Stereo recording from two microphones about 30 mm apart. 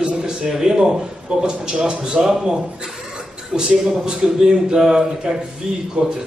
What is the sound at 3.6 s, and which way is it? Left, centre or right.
A man's voice, right.